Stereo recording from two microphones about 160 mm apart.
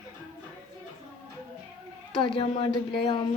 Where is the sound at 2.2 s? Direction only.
30° left (ahead or behind).